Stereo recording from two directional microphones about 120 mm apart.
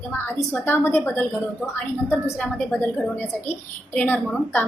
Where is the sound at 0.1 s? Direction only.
20° left (ahead or behind).